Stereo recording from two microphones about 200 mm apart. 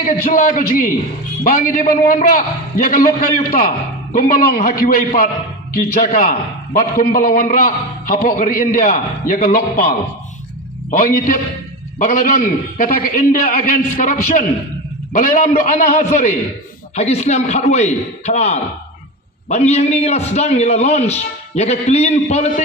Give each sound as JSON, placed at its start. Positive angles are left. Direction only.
{"t": 0.0, "sound": "a man's voice", "side_deg": 45}
{"t": 10.9, "sound": "a man's voice", "side_deg": 45}